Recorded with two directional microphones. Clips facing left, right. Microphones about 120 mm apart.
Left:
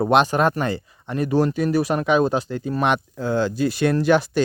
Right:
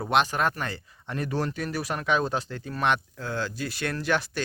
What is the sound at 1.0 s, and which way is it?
Speech, 5° left (ahead or behind).